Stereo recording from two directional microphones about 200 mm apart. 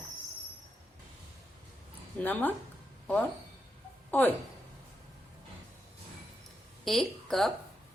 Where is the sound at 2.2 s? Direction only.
10° left (ahead or behind).